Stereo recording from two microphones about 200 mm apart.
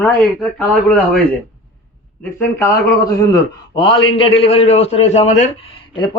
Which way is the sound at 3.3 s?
25° left (ahead or behind).